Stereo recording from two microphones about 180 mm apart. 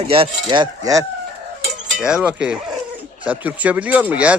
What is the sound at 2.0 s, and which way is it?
A man's voice, 5° right (ahead or behind).